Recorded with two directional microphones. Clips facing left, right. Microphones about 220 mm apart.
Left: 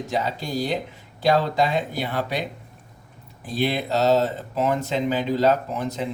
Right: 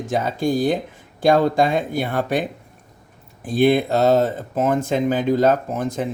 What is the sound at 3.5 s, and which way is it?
Speech, 50° right (ahead or behind).